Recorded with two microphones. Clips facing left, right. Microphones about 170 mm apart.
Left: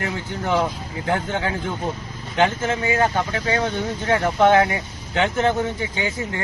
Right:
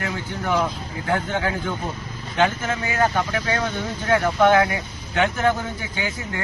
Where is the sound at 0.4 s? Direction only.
20° left (ahead or behind).